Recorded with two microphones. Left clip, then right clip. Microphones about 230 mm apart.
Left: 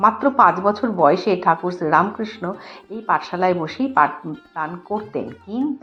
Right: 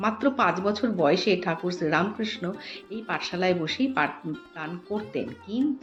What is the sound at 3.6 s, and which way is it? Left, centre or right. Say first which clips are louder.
Speech: left 8 dB; centre.